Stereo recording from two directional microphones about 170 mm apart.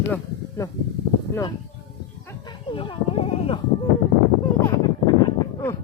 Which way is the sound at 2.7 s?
35° left (ahead or behind).